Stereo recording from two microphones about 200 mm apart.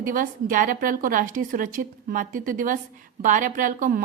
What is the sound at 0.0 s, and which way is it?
A woman's voice, 40° right (ahead or behind).